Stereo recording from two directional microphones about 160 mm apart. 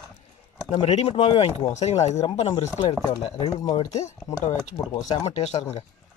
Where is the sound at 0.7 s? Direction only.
40° left (ahead or behind).